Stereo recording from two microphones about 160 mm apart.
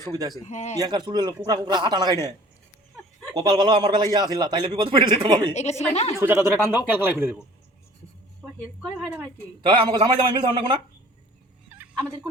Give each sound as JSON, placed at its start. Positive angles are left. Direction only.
{"t": 0.1, "sound": "a man's voice", "side_deg": -25}
{"t": 0.4, "sound": "a woman's voice", "side_deg": 45}
{"t": 0.8, "sound": "a man's voice", "side_deg": -25}
{"t": 3.3, "sound": "a man's voice", "side_deg": -25}
{"t": 5.8, "sound": "a woman's voice", "side_deg": 45}
{"t": 6.1, "sound": "speech", "side_deg": -15}
{"t": 8.8, "sound": "a woman's voice", "side_deg": -5}
{"t": 9.6, "sound": "a man's voice", "side_deg": -30}
{"t": 11.7, "sound": "fowl", "side_deg": -10}